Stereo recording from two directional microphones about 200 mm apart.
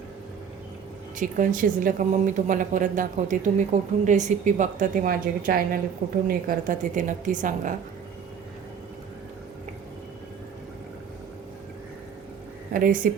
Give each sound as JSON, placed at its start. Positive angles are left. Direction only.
{"t": 1.2, "sound": "speech", "side_deg": -40}
{"t": 12.7, "sound": "speech", "side_deg": -45}